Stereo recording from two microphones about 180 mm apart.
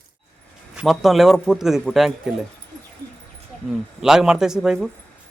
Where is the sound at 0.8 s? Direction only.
Centre (ahead or behind).